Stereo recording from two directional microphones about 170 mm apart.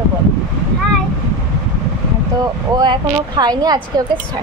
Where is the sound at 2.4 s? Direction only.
25° right (ahead or behind).